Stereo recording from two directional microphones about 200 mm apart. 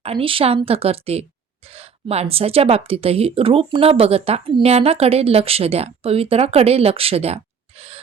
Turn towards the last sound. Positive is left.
turn(degrees=-30)  # may be behind; listen again after turning